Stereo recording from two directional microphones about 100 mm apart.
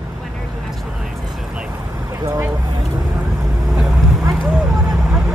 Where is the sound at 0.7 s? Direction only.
Centre (ahead or behind).